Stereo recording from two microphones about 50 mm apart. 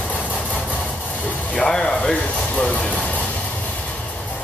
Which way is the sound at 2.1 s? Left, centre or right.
Left.